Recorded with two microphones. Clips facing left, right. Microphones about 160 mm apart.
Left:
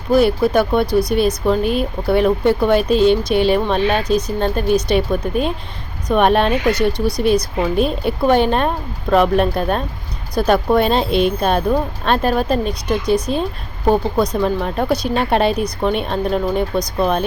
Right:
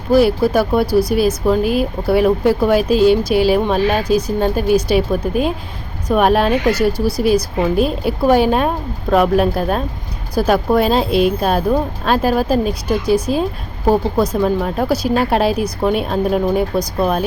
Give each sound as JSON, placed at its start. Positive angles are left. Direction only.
{"t": 0.1, "sound": "speech", "side_deg": 0}